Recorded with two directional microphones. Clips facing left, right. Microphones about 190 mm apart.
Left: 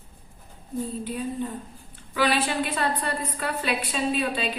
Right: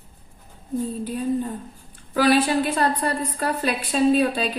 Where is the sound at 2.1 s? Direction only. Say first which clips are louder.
Right 6 dB; 45° right (ahead or behind).